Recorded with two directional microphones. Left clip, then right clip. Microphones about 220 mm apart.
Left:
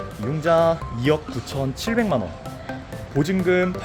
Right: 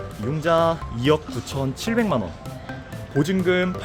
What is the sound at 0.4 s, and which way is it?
Speech, 5° right (ahead or behind).